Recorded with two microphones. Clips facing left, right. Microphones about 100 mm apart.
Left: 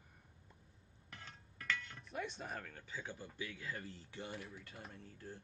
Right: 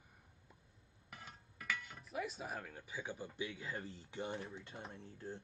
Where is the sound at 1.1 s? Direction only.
5° right (ahead or behind).